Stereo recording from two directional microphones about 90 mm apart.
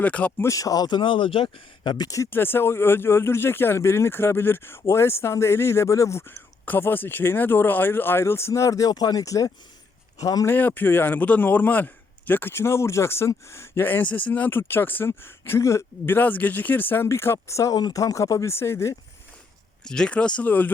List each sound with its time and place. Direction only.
0.0 s speech: 15° left (ahead or behind)
0.4 s speech: 40° left (ahead or behind)
0.9 s speech: 60° left (ahead or behind)
2.0 s speech: 40° left (ahead or behind)
2.3 s a man's voice: 25° left (ahead or behind); by 10.4 s 40° left (ahead or behind)
10.4 s a man's voice: 20° left (ahead or behind)
17.7 s speech: 45° left (ahead or behind); by 18.9 s 30° left (ahead or behind)
19.8 s speech: 10° left (ahead or behind)